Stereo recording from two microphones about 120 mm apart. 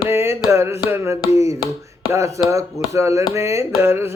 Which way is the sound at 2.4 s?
25° right (ahead or behind).